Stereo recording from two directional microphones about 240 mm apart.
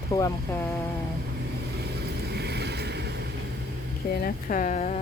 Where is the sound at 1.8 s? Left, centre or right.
Right.